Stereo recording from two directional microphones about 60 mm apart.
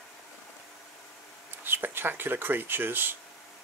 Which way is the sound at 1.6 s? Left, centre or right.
Right.